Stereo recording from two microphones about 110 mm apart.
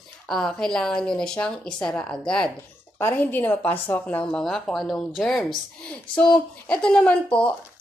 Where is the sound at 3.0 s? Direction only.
20° left (ahead or behind).